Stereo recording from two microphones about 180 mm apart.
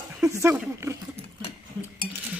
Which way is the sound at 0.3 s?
15° right (ahead or behind).